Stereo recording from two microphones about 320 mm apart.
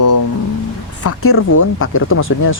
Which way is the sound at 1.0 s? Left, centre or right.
Left.